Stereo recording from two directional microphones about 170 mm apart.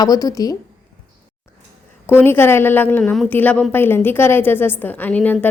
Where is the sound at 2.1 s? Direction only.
15° left (ahead or behind).